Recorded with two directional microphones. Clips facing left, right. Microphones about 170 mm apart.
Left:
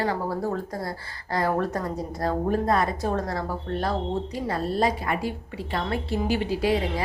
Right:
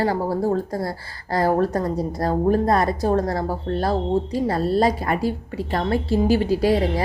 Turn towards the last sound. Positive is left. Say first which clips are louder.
# right 5 dB
turn(degrees=-40)  # may be behind; listen again after turning